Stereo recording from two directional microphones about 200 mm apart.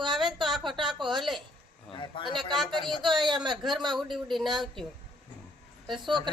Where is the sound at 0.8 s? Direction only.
25° right (ahead or behind).